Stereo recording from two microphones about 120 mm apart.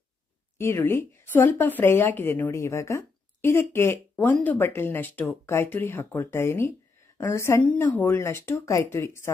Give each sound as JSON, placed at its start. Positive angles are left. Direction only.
{"t": 0.6, "sound": "speech", "side_deg": 20}
{"t": 7.6, "sound": "speech", "side_deg": 10}